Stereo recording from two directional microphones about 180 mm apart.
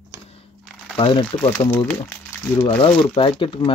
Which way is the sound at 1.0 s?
30° left (ahead or behind).